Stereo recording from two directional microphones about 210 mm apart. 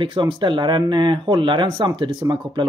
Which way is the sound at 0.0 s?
20° right (ahead or behind).